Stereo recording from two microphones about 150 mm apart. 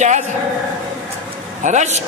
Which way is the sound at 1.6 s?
50° right (ahead or behind).